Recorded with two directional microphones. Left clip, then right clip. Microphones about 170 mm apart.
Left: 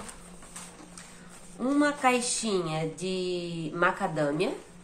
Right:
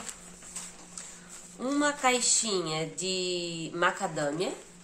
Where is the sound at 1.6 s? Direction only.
10° right (ahead or behind).